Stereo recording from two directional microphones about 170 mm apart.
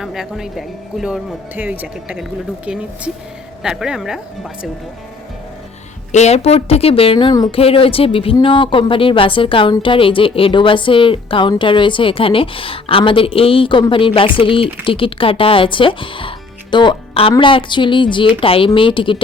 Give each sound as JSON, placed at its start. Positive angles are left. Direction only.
{"t": 0.0, "sound": "speech", "side_deg": 0}
{"t": 3.6, "sound": "speech", "side_deg": -5}
{"t": 6.1, "sound": "speech", "side_deg": 40}